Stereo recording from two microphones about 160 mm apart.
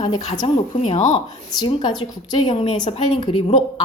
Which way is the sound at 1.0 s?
45° left (ahead or behind).